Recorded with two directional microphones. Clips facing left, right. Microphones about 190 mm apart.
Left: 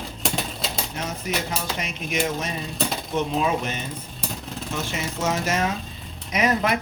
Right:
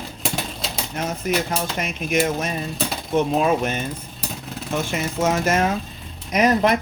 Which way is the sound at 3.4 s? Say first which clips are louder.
Right 4 dB; 50° right (ahead or behind).